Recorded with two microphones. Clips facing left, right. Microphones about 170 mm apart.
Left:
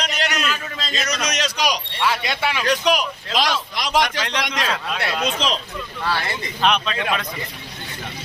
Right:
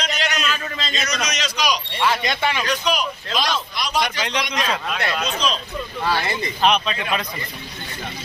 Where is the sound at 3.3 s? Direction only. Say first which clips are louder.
Left 2 dB; 90° left.